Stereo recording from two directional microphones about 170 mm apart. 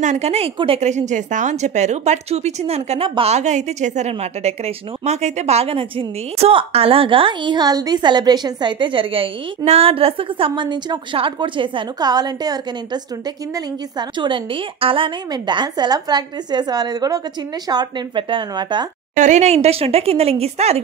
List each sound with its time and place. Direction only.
0.0 s a woman's voice: 40° right (ahead or behind); by 18.9 s 25° right (ahead or behind)
19.1 s a woman's voice: 45° right (ahead or behind)